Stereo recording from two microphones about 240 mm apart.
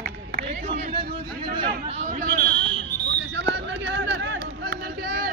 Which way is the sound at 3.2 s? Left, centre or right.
Right.